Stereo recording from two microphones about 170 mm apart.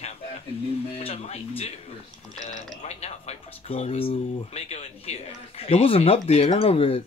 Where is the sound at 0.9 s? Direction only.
40° left (ahead or behind).